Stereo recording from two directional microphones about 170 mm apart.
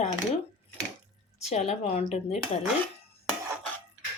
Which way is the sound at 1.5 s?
40° left (ahead or behind).